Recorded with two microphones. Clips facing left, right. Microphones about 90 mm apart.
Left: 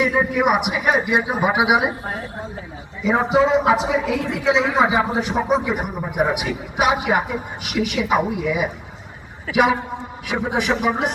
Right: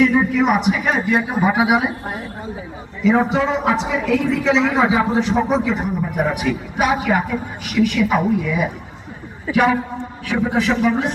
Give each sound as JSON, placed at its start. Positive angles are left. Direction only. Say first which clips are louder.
{"t": 0.0, "sound": "a man's voice", "louder": "right 3 dB", "side_deg": 15}
{"t": 2.0, "sound": "speech", "louder": "even", "side_deg": -5}
{"t": 3.0, "sound": "a man's voice", "louder": "right 1 dB", "side_deg": 15}